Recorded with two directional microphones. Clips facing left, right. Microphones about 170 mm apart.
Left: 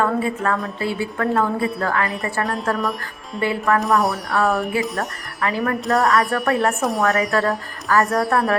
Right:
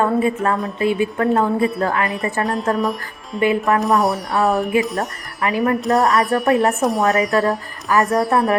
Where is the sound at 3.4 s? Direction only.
20° right (ahead or behind).